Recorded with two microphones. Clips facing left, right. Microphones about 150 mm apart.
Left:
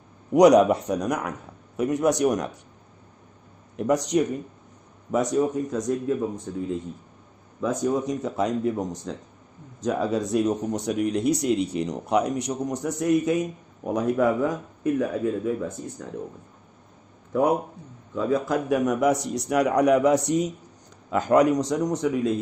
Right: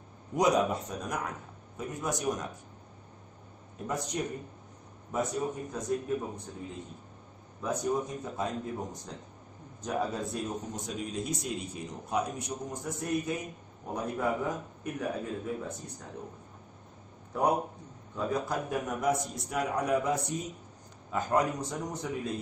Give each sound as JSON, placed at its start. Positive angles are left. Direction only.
{"t": 0.3, "sound": "a man's voice", "side_deg": 75}
{"t": 3.7, "sound": "speech", "side_deg": 80}
{"t": 7.6, "sound": "speech", "side_deg": 90}
{"t": 18.1, "sound": "speech", "side_deg": 90}